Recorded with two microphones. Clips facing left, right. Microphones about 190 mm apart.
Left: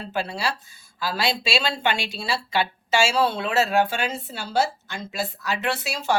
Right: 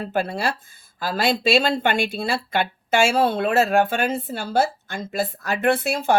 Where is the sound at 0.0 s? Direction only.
50° right (ahead or behind).